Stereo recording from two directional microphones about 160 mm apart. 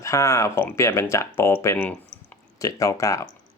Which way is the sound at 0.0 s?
20° left (ahead or behind).